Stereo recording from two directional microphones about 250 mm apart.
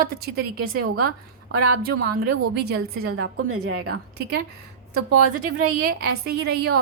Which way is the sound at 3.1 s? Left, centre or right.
Right.